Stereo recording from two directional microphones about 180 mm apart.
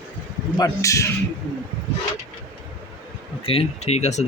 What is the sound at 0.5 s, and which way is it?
Speech, 20° left (ahead or behind).